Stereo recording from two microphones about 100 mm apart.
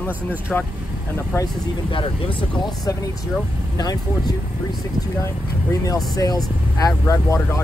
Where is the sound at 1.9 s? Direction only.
60° left (ahead or behind).